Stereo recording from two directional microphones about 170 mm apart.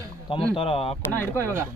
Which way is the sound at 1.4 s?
15° right (ahead or behind).